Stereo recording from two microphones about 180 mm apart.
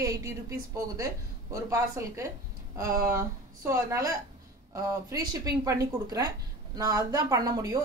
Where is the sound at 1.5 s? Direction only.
15° right (ahead or behind).